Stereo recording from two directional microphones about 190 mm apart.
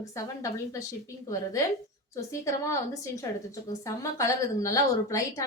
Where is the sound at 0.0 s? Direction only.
15° left (ahead or behind).